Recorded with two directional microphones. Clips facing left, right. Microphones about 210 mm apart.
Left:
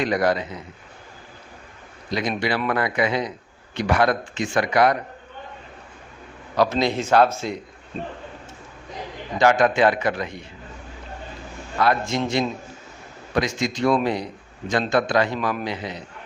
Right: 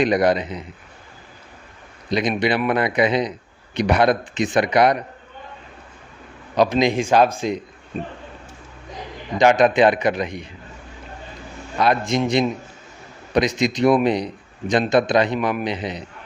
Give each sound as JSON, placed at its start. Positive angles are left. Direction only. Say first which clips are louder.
{"t": 0.0, "sound": "a man's voice", "louder": "right 4 dB", "side_deg": -20}
{"t": 2.0, "sound": "a man's voice", "louder": "right 4 dB", "side_deg": -20}
{"t": 6.6, "sound": "a man's voice", "louder": "right 3 dB", "side_deg": -15}
{"t": 9.4, "sound": "a man's voice", "louder": "right 3 dB", "side_deg": -20}
{"t": 11.8, "sound": "a man's voice", "louder": "right 2 dB", "side_deg": -20}